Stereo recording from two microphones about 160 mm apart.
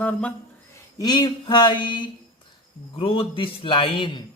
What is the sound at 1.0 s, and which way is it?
A man's voice, 25° left (ahead or behind).